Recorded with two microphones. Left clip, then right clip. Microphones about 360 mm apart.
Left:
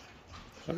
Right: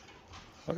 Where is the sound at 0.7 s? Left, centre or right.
Centre.